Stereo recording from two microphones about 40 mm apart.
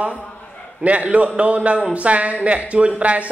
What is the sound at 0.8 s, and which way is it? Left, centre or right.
A man's voice, right.